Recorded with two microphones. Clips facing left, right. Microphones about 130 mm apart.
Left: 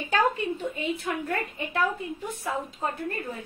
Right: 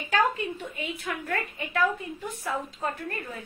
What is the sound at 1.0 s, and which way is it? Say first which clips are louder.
Speech: left 2 dB; 25° left (ahead or behind).